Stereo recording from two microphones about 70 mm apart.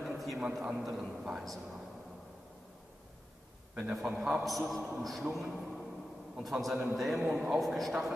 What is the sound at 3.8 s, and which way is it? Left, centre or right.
A man's voice, centre.